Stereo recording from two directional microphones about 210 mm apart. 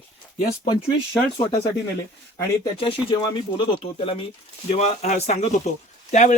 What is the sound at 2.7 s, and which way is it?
Speech, 25° left (ahead or behind).